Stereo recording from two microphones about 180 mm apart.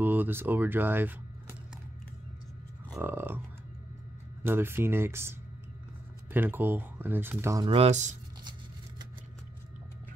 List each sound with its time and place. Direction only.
0.0 s speech: 10° right (ahead or behind)
3.0 s speech: 10° right (ahead or behind)
4.4 s speech: 10° right (ahead or behind)
7.6 s speech: 30° right (ahead or behind)